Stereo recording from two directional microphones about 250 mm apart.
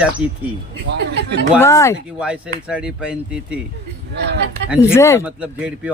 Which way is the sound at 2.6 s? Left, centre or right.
Centre.